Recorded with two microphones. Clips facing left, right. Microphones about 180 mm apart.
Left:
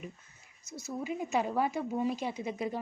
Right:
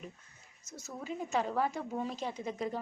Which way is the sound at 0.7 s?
10° left (ahead or behind).